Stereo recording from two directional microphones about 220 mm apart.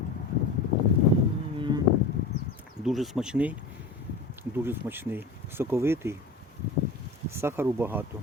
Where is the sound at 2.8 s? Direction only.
Centre (ahead or behind).